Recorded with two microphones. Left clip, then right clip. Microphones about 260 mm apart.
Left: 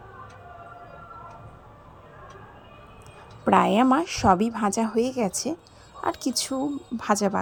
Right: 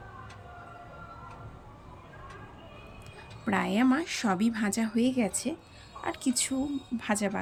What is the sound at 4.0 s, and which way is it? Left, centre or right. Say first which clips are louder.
A woman's voice: left 9 dB; centre.